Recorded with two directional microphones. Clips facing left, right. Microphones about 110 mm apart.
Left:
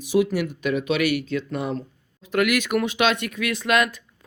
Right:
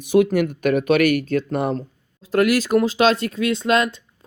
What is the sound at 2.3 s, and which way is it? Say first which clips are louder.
Speech: right 4 dB; 35° right (ahead or behind).